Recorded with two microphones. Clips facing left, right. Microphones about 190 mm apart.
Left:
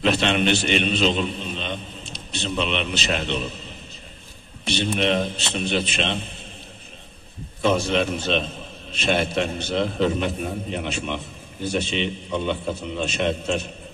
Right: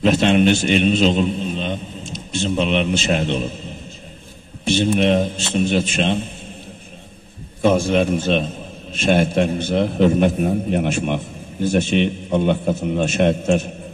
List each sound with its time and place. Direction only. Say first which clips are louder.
0.0 s a man's voice: right 6 dB; 45° right (ahead or behind)
4.6 s a man's voice: right 6 dB; 50° right (ahead or behind)
7.6 s a man's voice: right 5 dB; 50° right (ahead or behind)